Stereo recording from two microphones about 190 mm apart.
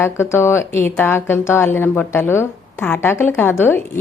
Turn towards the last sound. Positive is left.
turn(degrees=10)  # may be behind; listen again after turning